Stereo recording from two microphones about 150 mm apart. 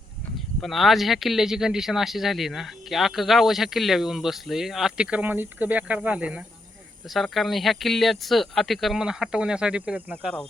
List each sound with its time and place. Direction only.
0.3 s speech: centre (ahead or behind)